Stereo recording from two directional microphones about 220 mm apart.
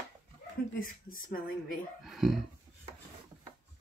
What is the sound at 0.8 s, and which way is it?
Speech, 40° left (ahead or behind).